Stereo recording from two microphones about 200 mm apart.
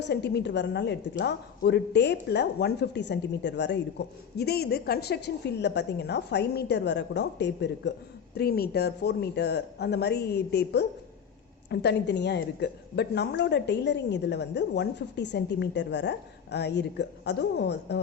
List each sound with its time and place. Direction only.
0.1 s speech: 55° left (ahead or behind)